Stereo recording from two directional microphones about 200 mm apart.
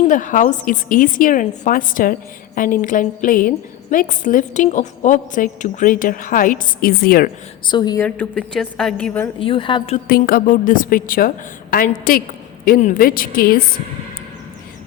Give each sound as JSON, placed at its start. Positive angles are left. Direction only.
{"t": 0.0, "sound": "a woman's voice", "side_deg": 40}
{"t": 7.6, "sound": "a woman's voice", "side_deg": 20}
{"t": 8.0, "sound": "a woman's voice", "side_deg": 5}
{"t": 9.4, "sound": "a woman's voice", "side_deg": 25}
{"t": 10.1, "sound": "a woman's voice", "side_deg": 50}